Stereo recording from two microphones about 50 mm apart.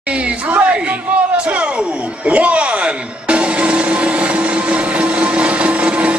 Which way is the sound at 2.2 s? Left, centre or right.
Right.